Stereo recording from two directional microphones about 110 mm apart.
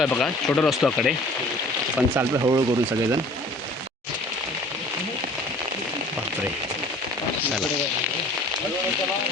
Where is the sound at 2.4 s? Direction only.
35° right (ahead or behind).